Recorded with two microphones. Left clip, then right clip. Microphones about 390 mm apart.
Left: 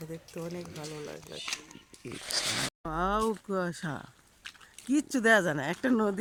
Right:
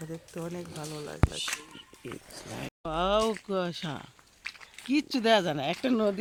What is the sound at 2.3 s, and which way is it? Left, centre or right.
Speech, left.